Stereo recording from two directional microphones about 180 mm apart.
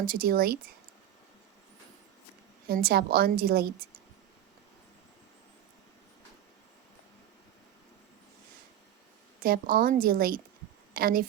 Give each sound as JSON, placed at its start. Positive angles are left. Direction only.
{"t": 0.0, "sound": "a woman's voice", "side_deg": -55}
{"t": 2.6, "sound": "a woman's voice", "side_deg": -55}
{"t": 9.4, "sound": "a woman's voice", "side_deg": -55}